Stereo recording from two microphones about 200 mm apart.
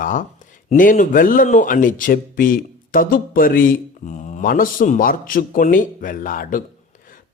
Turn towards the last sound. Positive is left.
turn(degrees=45)  # may be behind; listen again after turning